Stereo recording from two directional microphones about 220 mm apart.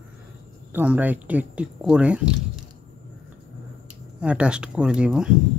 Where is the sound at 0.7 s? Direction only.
5° right (ahead or behind).